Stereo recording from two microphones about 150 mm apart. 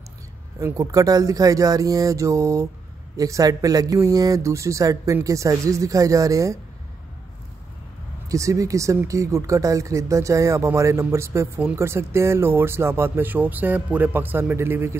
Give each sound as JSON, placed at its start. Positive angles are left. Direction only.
{"t": 0.6, "sound": "speech", "side_deg": -20}
{"t": 8.3, "sound": "speech", "side_deg": -20}